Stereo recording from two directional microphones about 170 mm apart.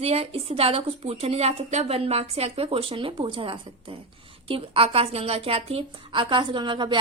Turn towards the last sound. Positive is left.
turn(degrees=-25)  # may be behind; listen again after turning